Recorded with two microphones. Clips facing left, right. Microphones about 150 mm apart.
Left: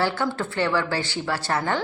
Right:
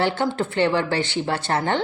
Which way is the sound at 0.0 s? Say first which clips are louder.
Right 3 dB; 20° right (ahead or behind).